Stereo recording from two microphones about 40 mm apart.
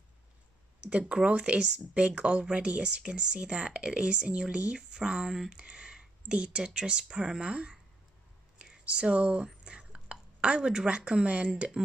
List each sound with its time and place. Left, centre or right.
0.8 s speech: right
5.3 s speech: centre
5.6 s speech: right
9.8 s a sound: right
10.9 s speech: right